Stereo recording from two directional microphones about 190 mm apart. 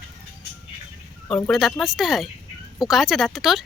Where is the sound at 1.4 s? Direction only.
Centre (ahead or behind).